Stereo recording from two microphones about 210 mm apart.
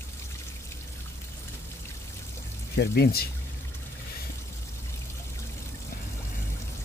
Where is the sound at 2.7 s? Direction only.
50° left (ahead or behind).